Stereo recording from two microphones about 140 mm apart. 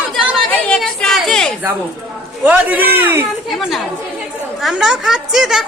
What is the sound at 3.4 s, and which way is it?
A woman's voice, centre (ahead or behind).